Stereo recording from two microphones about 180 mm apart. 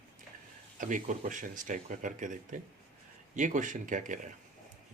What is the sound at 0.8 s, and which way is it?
Speech, 45° right (ahead or behind).